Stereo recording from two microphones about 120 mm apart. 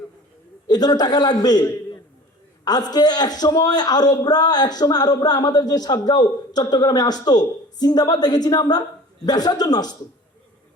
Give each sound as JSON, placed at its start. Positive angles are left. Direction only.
{"t": 0.7, "sound": "a man's voice", "side_deg": 35}